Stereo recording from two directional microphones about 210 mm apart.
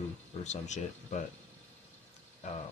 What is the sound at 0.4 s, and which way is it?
Speech, 35° left (ahead or behind).